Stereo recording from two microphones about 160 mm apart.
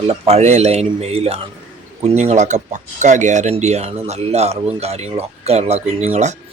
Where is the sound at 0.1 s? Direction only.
40° right (ahead or behind).